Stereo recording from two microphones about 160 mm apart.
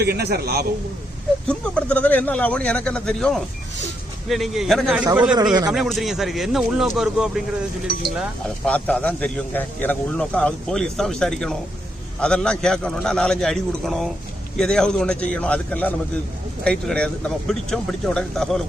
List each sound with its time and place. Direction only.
0.0 s a man's voice: 85° right
1.5 s a man's voice: 5° left (ahead or behind)
8.6 s a man's voice: 5° left (ahead or behind)